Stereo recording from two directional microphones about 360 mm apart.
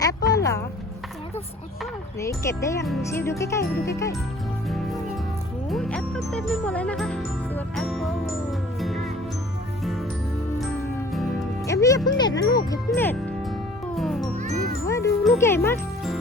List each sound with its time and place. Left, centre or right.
0.0 s a sound: centre
1.8 s speech: centre
3.9 s music: centre
9.8 s music: centre
11.1 s music: centre
14.3 s music: right
14.8 s music: centre